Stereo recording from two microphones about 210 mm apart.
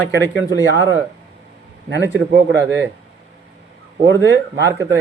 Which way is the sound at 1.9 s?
55° right (ahead or behind).